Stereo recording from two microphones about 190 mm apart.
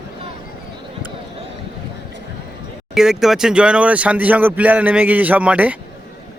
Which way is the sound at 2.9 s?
Centre (ahead or behind).